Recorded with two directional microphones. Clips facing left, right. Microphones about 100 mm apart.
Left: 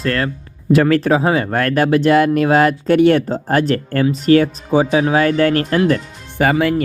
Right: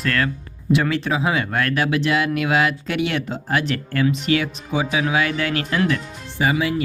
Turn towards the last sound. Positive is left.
turn(degrees=55)  # may be behind; listen again after turning